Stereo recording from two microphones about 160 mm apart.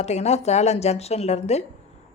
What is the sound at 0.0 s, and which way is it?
Speech, 45° left (ahead or behind).